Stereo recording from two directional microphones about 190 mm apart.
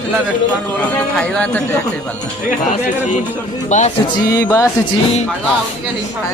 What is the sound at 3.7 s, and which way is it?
Speech, 40° left (ahead or behind).